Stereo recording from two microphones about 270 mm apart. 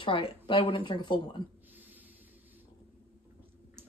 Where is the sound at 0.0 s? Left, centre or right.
Centre.